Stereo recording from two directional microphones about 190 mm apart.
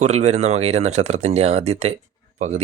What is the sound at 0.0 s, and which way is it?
Speech, 35° right (ahead or behind).